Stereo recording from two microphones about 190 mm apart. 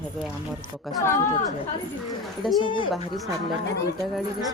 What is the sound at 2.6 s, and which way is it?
Speech, 25° left (ahead or behind).